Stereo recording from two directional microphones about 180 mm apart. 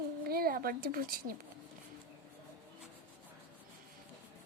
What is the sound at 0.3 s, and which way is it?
A woman's voice, 55° right (ahead or behind).